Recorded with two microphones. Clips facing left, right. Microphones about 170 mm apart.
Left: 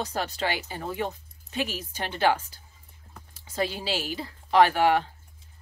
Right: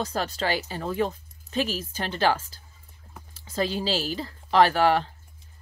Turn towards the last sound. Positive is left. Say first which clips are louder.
# even
turn(degrees=10)  # may be behind; listen again after turning